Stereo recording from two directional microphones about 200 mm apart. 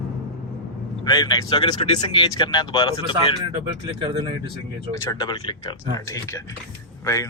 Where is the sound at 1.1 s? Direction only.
20° left (ahead or behind).